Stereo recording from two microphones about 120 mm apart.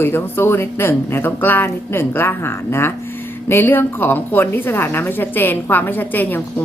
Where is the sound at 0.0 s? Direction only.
20° left (ahead or behind).